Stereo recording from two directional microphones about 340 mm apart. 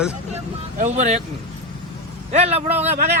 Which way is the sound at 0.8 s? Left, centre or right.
Centre.